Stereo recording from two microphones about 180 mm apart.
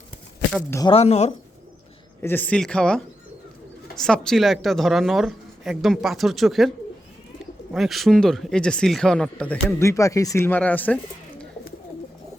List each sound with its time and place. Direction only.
0.9 s speech: 35° left (ahead or behind)
2.2 s speech: 10° left (ahead or behind)